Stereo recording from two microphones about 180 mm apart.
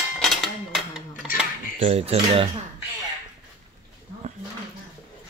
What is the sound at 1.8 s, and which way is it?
Speech, 35° right (ahead or behind).